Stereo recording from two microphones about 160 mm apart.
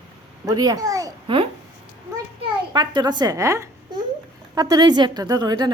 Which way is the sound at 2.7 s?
30° right (ahead or behind).